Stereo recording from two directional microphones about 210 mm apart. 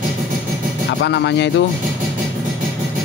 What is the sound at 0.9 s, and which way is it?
Speech, 55° left (ahead or behind).